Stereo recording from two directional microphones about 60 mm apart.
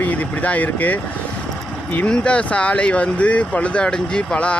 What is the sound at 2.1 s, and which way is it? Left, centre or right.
Speech, centre.